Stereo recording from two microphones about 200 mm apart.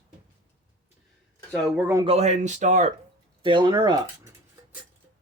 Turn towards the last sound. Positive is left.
turn(degrees=-20)  # may be behind; listen again after turning